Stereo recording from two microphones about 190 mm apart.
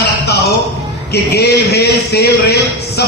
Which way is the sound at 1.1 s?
60° left (ahead or behind).